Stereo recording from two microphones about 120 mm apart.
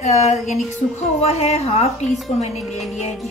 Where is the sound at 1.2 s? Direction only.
60° left (ahead or behind).